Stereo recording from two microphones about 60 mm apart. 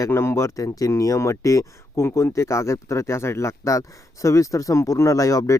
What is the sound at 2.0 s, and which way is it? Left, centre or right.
Speech, left.